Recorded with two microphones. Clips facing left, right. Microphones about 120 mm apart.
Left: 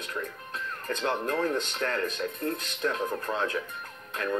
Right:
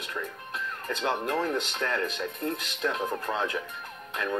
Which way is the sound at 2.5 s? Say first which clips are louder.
Right 1 dB; 25° right (ahead or behind).